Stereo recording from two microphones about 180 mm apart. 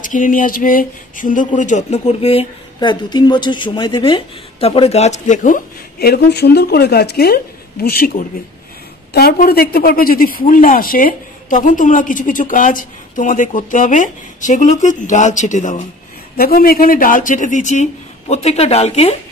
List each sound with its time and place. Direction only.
0.0 s speech: 45° left (ahead or behind)
16.3 s speech: 55° left (ahead or behind); by 19.1 s 35° left (ahead or behind)